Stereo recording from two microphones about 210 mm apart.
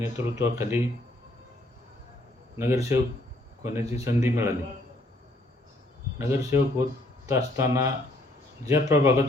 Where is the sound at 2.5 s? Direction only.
10° right (ahead or behind).